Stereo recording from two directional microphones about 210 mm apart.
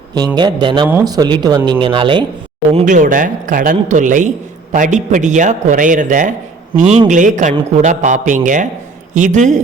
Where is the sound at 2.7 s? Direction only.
40° right (ahead or behind).